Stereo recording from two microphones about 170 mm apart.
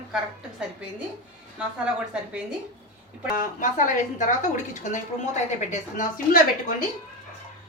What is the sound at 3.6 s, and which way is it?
A woman's voice, 50° left (ahead or behind).